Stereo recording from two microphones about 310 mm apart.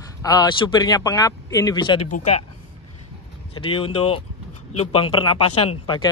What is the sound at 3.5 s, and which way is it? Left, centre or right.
A man's voice, centre.